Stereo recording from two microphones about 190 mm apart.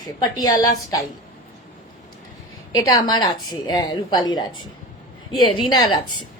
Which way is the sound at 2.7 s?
20° left (ahead or behind).